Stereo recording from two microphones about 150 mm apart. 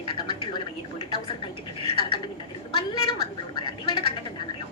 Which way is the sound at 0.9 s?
35° left (ahead or behind).